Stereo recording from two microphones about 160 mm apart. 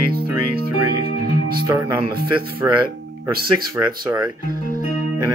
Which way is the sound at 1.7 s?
20° right (ahead or behind).